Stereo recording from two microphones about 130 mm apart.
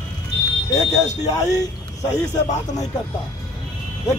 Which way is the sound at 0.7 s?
25° left (ahead or behind).